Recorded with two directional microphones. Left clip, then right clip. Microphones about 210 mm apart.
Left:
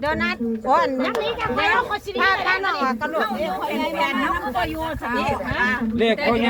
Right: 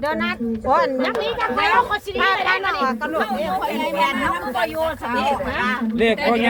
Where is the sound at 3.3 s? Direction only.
50° right (ahead or behind).